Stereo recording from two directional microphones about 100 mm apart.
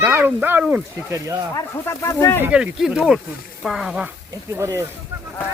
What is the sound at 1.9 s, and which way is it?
Speech, 25° left (ahead or behind).